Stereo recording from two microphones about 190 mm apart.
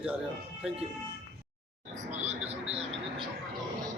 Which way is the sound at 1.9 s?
35° right (ahead or behind).